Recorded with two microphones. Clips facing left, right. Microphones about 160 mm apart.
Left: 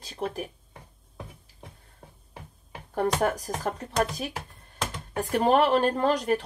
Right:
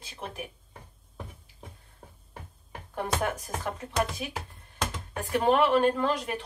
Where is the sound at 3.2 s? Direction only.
40° left (ahead or behind).